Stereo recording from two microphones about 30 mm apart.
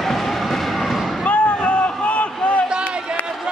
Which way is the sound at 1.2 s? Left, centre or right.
Left.